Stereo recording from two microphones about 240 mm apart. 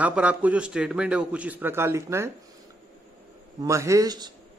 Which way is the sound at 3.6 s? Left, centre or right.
Centre.